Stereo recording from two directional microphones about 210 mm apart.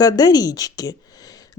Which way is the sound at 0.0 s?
20° left (ahead or behind).